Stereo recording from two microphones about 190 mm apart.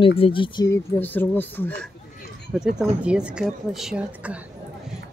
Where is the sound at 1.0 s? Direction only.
10° left (ahead or behind).